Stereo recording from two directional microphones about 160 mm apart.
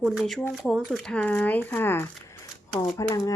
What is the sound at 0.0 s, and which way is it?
Speech, centre (ahead or behind).